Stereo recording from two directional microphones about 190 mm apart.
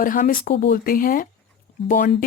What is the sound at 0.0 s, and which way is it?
Speech, 45° left (ahead or behind).